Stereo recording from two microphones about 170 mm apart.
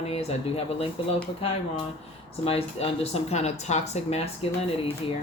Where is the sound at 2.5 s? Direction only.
35° left (ahead or behind).